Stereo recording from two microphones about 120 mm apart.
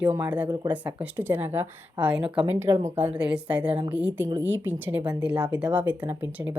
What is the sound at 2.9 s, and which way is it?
Speech, 10° right (ahead or behind).